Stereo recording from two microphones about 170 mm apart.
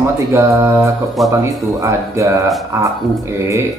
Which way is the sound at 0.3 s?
15° right (ahead or behind).